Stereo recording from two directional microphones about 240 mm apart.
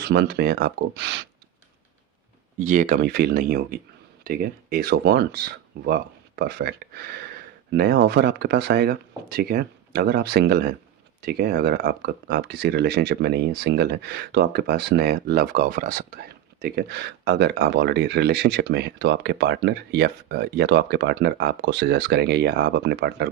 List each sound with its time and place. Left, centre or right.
0.1 s speech: right
2.6 s speech: right